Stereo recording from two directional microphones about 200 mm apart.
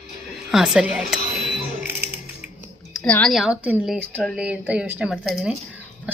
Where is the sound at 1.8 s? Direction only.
10° right (ahead or behind).